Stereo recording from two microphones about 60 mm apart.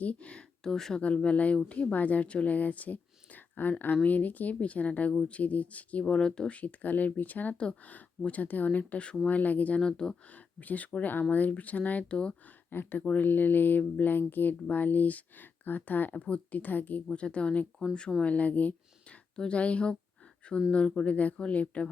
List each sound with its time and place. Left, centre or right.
0.0 s speech: left
1.0 s speech: left
6.6 s speech: left
10.3 s speech: left
12.7 s speech: left
17.1 s speech: centre